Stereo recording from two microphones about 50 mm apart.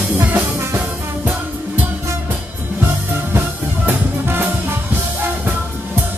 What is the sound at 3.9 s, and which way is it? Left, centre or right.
Music, right.